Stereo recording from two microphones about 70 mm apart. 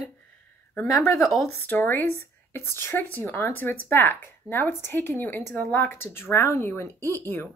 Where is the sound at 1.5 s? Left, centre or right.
Left.